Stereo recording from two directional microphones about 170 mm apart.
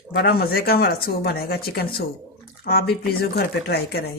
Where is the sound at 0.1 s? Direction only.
65° left (ahead or behind).